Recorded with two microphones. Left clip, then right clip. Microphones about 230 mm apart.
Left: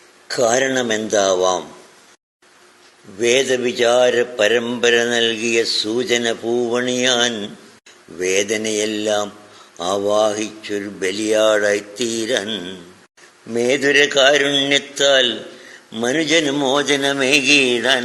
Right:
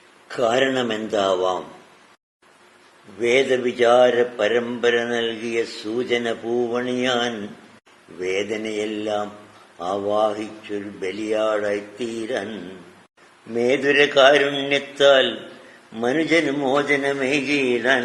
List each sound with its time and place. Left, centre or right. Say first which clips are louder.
0.3 s speech: left 3 dB; left
3.2 s speech: left 2 dB; left
13.5 s speech: left 3 dB; left